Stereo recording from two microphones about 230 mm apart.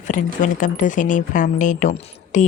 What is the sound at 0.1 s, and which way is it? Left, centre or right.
Speech, left.